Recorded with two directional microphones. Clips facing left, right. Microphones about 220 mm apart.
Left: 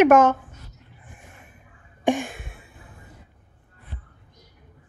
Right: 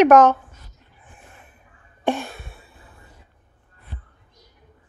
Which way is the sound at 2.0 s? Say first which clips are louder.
Left 1 dB; 15° left (ahead or behind).